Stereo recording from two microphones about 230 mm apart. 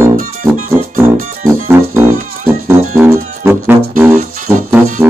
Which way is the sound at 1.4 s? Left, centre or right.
Centre.